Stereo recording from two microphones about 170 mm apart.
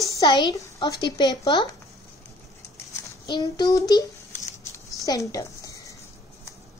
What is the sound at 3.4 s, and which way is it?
Speech, 20° left (ahead or behind).